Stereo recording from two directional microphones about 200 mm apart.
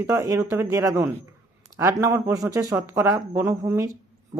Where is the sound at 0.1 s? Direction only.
15° right (ahead or behind).